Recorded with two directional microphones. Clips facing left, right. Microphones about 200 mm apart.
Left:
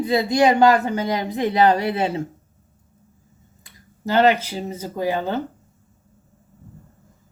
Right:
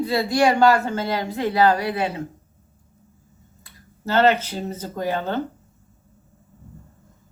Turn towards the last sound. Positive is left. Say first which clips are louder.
# left 2 dB
turn(degrees=10)  # may be behind; listen again after turning